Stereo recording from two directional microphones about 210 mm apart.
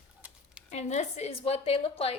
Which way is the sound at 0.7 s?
35° left (ahead or behind).